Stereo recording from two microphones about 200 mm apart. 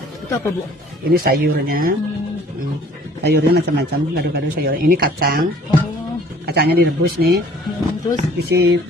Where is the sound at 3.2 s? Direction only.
55° right (ahead or behind).